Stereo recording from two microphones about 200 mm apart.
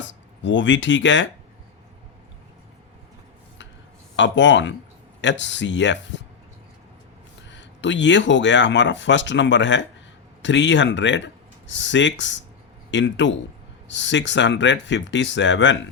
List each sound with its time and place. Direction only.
0.0 s speech: 65° left (ahead or behind)
4.2 s speech: 65° left (ahead or behind)
7.4 s speech: 65° left (ahead or behind)